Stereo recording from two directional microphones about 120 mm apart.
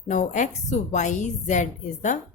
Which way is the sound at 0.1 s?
85° left.